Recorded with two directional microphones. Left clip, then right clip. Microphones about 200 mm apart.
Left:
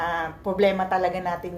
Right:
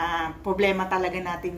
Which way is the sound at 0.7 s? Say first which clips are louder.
Left 2 dB; 10° right (ahead or behind).